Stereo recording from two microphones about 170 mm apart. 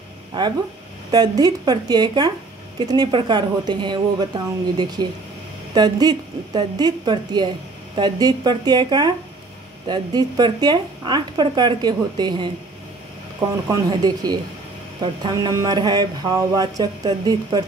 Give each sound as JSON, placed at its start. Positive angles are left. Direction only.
{"t": 1.1, "sound": "speech", "side_deg": -25}
{"t": 13.7, "sound": "speech", "side_deg": -20}